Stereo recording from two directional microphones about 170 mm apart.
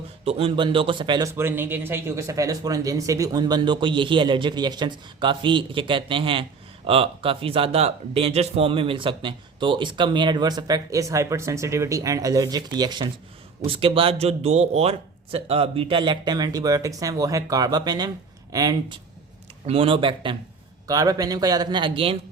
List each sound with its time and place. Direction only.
0.3 s speech: 35° right (ahead or behind)
1.3 s speech: 15° right (ahead or behind)
19.6 s speech: 35° right (ahead or behind)